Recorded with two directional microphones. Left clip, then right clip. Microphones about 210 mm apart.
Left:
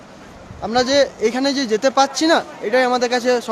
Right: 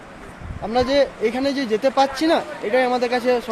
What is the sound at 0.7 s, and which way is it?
Speech, 15° left (ahead or behind).